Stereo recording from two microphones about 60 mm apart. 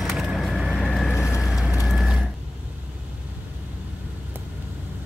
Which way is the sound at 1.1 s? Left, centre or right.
Left.